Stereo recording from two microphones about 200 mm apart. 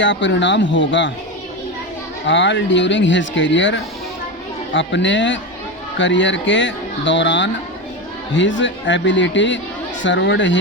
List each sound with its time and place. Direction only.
0.0 s speech: 65° left (ahead or behind)
2.2 s speech: 65° left (ahead or behind)